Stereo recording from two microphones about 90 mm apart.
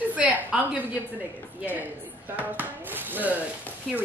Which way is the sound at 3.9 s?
5° right (ahead or behind).